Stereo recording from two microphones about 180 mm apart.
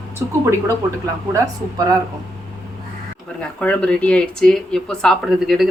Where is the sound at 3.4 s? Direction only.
5° left (ahead or behind).